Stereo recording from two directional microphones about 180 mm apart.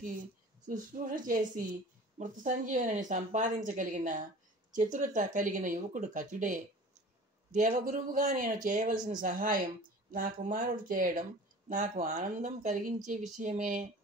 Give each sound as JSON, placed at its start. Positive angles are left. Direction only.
{"t": 0.0, "sound": "a woman's voice", "side_deg": -50}